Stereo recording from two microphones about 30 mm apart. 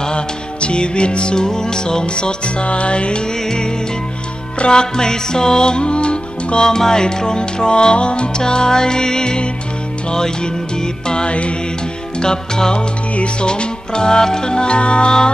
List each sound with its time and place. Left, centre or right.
0.0 s music: left
3.4 s music: left
6.6 s music: left
11.2 s music: left
12.2 s music: left
13.1 s music: left
13.5 s music: left